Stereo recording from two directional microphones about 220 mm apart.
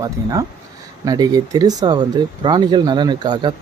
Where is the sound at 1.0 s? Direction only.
15° right (ahead or behind).